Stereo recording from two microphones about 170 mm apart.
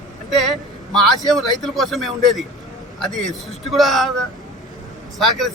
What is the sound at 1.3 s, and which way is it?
Speech, centre (ahead or behind).